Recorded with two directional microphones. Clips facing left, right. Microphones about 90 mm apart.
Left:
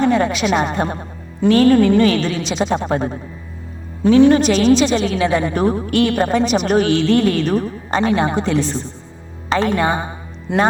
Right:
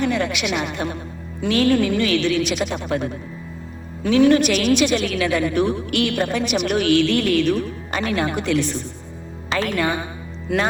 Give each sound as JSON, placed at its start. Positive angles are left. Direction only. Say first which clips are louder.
{"t": 0.0, "sound": "a woman's voice", "louder": "left 6 dB", "side_deg": 35}